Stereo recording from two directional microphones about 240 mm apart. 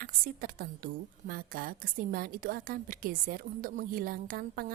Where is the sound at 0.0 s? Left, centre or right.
Right.